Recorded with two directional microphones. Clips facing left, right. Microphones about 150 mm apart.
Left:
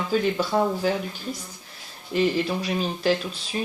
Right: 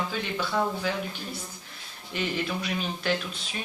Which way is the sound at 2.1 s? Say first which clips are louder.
Left 7 dB; 35° left (ahead or behind).